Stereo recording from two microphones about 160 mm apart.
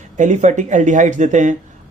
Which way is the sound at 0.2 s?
50° right (ahead or behind).